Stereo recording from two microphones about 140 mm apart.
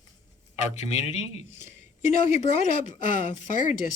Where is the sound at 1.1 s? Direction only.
55° left (ahead or behind).